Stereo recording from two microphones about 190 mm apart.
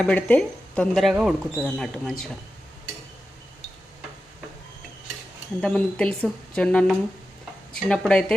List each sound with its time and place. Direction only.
0.0 s speech: 5° left (ahead or behind)
5.5 s speech: 5° left (ahead or behind)